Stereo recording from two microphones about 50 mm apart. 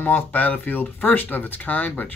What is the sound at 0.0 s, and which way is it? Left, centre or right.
Speech, left.